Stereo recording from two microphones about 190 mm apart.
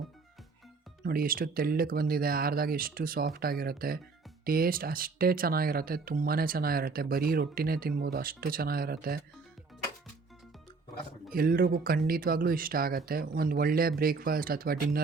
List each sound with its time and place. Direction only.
1.0 s speech: 50° right (ahead or behind)
11.3 s speech: 50° right (ahead or behind)